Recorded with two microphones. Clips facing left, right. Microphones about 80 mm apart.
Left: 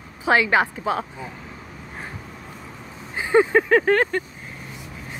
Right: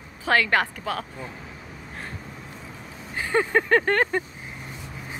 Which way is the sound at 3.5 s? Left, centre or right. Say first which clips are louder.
Left 3 dB; centre.